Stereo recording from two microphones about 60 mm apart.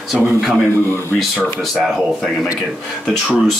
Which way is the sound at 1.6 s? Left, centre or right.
Centre.